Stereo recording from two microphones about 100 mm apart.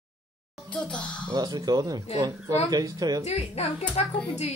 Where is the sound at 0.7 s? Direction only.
10° left (ahead or behind).